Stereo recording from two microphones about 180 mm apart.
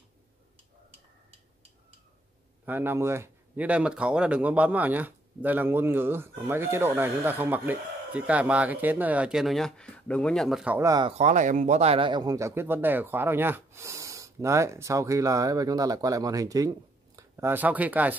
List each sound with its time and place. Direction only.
2.6 s speech: 10° right (ahead or behind)
10.8 s speech: 20° right (ahead or behind)
11.1 s speech: 40° right (ahead or behind); by 18.1 s 10° right (ahead or behind)